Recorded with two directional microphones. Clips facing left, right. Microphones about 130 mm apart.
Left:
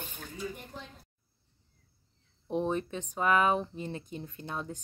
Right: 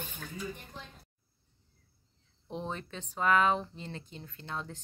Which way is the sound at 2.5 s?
15° left (ahead or behind).